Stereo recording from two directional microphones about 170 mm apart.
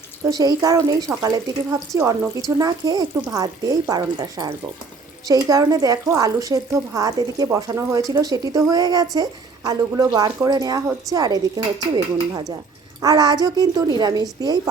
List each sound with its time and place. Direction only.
0.3 s speech: 20° right (ahead or behind)